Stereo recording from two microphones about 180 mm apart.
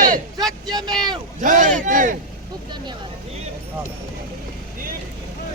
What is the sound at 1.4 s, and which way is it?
Speech, 45° right (ahead or behind).